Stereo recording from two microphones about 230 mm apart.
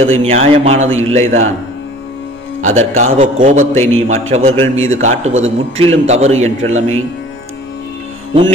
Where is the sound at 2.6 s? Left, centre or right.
Right.